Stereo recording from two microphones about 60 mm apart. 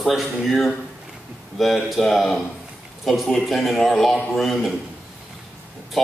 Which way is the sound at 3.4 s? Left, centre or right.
Centre.